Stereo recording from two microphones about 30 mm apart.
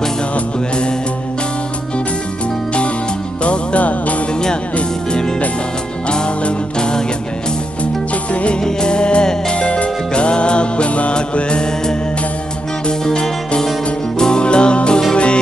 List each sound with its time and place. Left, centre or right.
3.4 s music: left
6.0 s music: left
7.8 s music: left
8.5 s music: left
13.0 s music: left